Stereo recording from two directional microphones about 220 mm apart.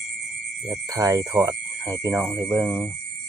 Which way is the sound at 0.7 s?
15° right (ahead or behind).